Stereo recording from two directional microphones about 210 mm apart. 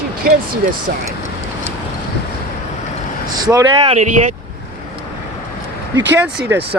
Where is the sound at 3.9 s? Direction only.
35° right (ahead or behind).